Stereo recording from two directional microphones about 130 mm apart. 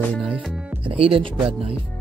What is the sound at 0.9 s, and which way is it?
Speech, 45° right (ahead or behind).